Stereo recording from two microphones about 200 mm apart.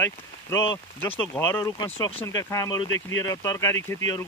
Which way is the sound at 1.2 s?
10° left (ahead or behind).